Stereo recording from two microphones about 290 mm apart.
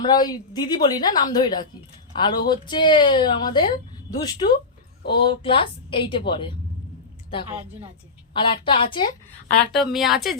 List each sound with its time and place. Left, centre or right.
0.0 s a woman's voice: centre
8.3 s a woman's voice: centre
9.7 s a woman's voice: centre